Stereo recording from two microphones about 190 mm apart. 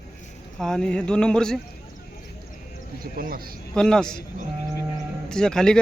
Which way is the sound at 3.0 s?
50° right (ahead or behind).